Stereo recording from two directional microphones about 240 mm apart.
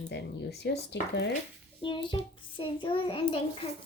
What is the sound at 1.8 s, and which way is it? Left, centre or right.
A child's voice, centre.